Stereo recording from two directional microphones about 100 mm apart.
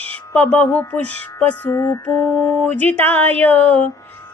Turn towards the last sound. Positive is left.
turn(degrees=15)  # may be behind; listen again after turning